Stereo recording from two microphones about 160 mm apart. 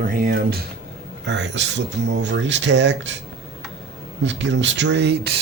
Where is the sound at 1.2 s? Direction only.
90° right.